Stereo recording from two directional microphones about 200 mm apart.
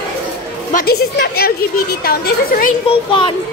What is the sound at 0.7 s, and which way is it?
A woman's voice, 50° left (ahead or behind).